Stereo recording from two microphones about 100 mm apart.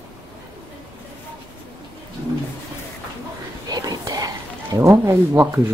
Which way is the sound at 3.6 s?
40° right (ahead or behind).